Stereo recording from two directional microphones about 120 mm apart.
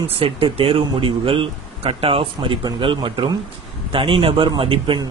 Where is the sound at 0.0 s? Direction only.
50° right (ahead or behind).